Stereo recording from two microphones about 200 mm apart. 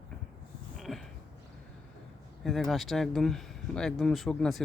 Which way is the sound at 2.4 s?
Centre (ahead or behind).